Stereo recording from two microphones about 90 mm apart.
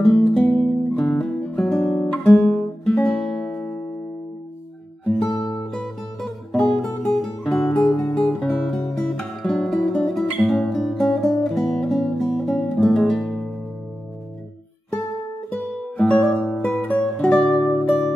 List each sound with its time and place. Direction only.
0.0 s music: centre (ahead or behind)
0.6 s guitar: 5° left (ahead or behind)
2.3 s music: 5° left (ahead or behind)
5.2 s music: centre (ahead or behind)
6.5 s music: 5° left (ahead or behind)
16.0 s music: 10° left (ahead or behind)
17.3 s music: 5° left (ahead or behind)